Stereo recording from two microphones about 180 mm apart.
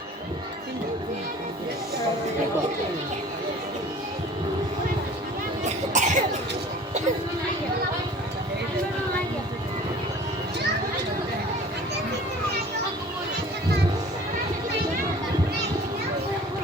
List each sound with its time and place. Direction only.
5.6 s cough: 45° right (ahead or behind)